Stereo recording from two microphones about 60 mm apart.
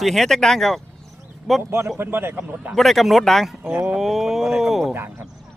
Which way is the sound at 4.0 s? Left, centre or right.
Centre.